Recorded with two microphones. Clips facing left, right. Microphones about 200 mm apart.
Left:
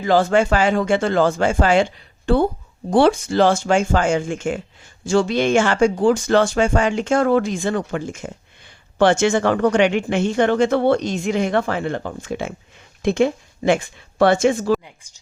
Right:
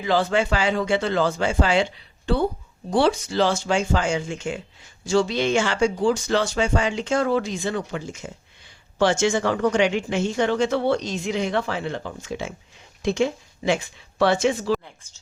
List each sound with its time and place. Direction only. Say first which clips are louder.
0.0 s a woman's voice: left 5 dB; 45° left (ahead or behind)
15.0 s speech: even; 15° left (ahead or behind)